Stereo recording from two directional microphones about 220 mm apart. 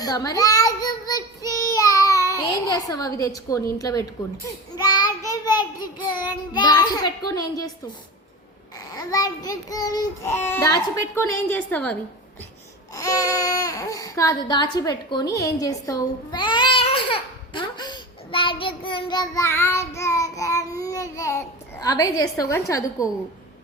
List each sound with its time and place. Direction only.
0.0 s child singing: 15° left (ahead or behind)
9.0 s a child's voice: 15° left (ahead or behind)
12.9 s babbling: 15° left (ahead or behind)
18.8 s child singing: 20° left (ahead or behind)
23.0 s a child's voice: 15° left (ahead or behind)